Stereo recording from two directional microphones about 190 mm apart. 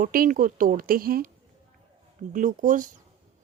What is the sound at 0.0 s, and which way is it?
Speech, 45° right (ahead or behind).